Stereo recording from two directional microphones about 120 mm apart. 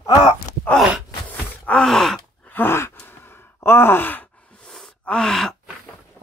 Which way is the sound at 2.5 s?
20° left (ahead or behind).